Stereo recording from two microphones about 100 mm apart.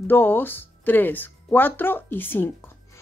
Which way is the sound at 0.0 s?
20° left (ahead or behind).